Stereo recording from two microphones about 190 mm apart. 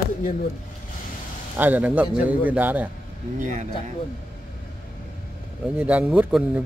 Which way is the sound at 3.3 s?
40° right (ahead or behind).